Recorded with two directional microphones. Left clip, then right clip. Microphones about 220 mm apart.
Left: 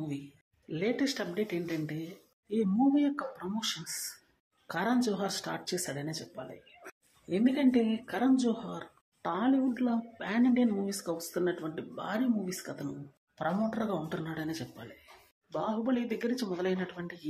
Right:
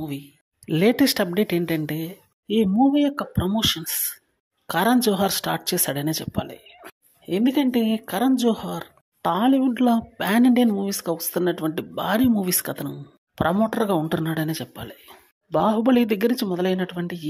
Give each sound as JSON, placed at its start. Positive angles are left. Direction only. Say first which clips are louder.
{"t": 0.7, "sound": "speech", "louder": "right 12 dB", "side_deg": -50}